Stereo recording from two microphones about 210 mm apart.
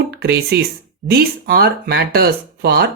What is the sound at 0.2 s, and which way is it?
Speech, 50° right (ahead or behind).